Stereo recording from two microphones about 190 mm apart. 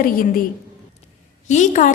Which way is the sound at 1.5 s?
40° left (ahead or behind).